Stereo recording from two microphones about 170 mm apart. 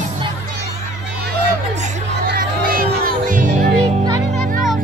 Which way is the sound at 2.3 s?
55° right (ahead or behind).